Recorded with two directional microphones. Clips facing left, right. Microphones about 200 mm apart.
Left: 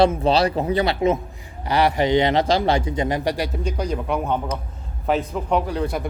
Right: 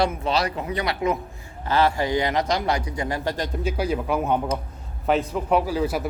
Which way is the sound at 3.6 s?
5° right (ahead or behind).